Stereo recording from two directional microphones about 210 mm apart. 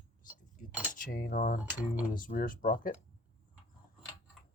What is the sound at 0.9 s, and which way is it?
Speech, 40° left (ahead or behind).